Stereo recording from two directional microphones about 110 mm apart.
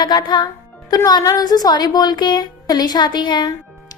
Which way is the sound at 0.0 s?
40° left (ahead or behind).